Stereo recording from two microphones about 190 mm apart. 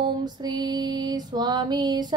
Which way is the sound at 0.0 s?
20° right (ahead or behind).